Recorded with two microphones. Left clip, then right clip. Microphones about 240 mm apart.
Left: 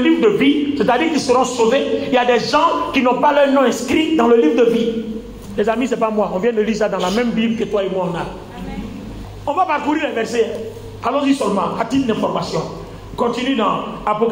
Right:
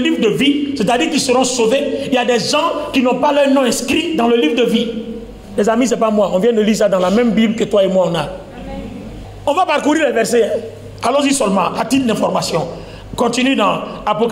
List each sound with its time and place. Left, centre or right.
0.0 s a man's voice: right
5.6 s a man's voice: right
5.9 s a man's voice: right
7.3 s a man's voice: right
9.5 s a man's voice: right